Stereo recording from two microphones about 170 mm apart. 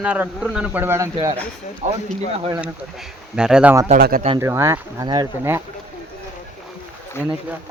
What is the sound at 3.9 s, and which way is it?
Speech, 55° right (ahead or behind).